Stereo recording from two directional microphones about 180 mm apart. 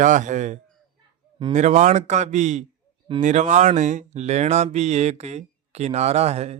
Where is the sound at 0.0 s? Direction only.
45° right (ahead or behind).